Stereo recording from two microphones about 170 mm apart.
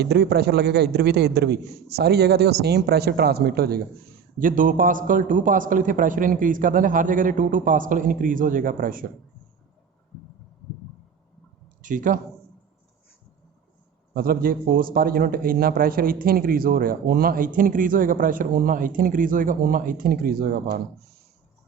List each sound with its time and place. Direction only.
0.0 s a man's voice: 75° right (ahead or behind)
4.4 s a man's voice: 55° right (ahead or behind)
11.8 s speech: 50° right (ahead or behind)
14.1 s a man's voice: 60° right (ahead or behind)